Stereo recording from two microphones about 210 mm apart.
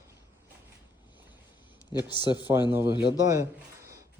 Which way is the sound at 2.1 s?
20° left (ahead or behind).